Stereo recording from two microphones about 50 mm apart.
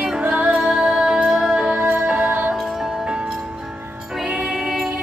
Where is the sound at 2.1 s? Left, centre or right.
Right.